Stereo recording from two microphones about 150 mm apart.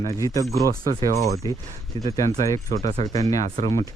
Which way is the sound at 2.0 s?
25° left (ahead or behind).